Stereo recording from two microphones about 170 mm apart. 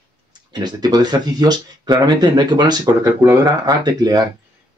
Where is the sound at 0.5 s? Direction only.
25° right (ahead or behind).